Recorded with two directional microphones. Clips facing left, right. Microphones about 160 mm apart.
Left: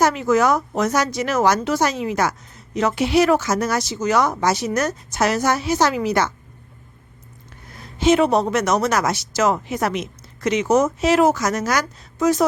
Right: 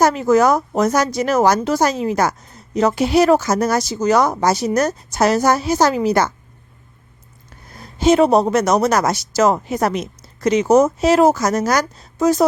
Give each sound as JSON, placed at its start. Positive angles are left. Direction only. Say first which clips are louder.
{"t": 0.0, "sound": "a woman's voice", "louder": "right 3 dB", "side_deg": -40}
{"t": 7.8, "sound": "a woman's voice", "louder": "right 3 dB", "side_deg": -40}